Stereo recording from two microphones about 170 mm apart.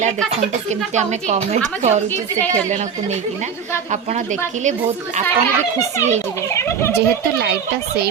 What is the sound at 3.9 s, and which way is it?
Speech, 45° right (ahead or behind).